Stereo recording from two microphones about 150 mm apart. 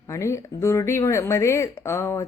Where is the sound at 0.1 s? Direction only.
20° left (ahead or behind).